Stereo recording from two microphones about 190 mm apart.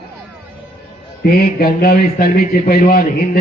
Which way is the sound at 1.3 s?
50° left (ahead or behind).